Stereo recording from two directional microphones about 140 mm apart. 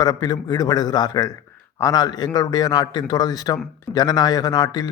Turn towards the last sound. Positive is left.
turn(degrees=30)  # may be behind; listen again after turning